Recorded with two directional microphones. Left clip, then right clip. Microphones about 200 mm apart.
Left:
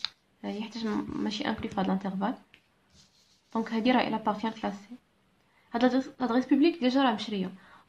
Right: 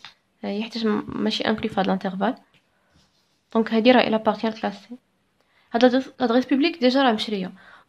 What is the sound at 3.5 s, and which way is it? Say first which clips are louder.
Speech: right 10 dB; 30° right (ahead or behind).